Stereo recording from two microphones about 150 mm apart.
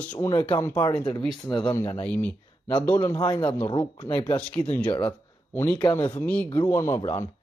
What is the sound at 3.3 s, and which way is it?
Speech, 30° left (ahead or behind).